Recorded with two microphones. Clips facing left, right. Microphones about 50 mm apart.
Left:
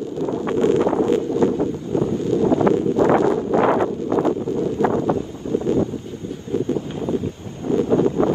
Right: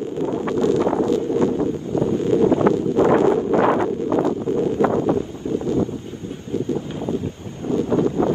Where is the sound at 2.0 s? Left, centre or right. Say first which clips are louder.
Right 3 dB; right.